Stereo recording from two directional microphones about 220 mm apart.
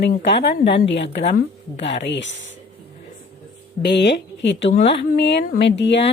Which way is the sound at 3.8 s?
50° left (ahead or behind).